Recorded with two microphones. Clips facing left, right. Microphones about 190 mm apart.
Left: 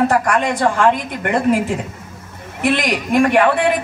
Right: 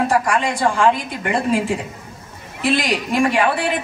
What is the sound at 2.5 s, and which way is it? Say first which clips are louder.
A woman's voice: left 1 dB; 60° left (ahead or behind).